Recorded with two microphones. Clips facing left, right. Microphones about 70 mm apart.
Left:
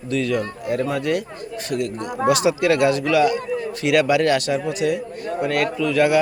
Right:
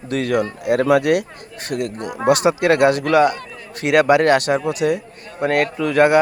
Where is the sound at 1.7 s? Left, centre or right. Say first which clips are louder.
Right 1 dB; right.